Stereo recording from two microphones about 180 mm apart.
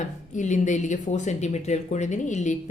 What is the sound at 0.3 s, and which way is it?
A woman's voice, 40° left (ahead or behind).